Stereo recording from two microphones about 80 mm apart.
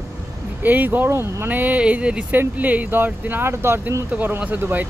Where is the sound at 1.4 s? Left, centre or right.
Right.